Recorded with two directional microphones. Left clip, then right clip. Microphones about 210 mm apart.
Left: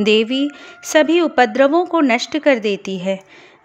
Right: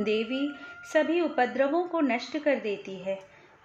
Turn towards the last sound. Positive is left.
turn(degrees=50)  # may be behind; listen again after turning